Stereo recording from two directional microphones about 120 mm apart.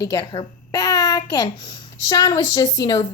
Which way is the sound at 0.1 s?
30° left (ahead or behind).